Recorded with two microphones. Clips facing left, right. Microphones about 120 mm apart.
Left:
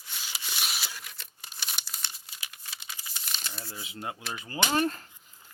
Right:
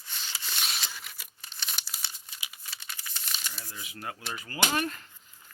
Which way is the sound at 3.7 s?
25° left (ahead or behind).